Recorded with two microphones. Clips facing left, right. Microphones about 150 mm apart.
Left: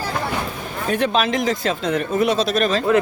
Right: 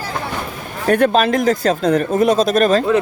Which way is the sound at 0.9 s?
50° right (ahead or behind).